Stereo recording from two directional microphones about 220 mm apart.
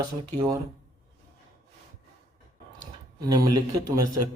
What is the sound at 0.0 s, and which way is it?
Speech, 15° right (ahead or behind).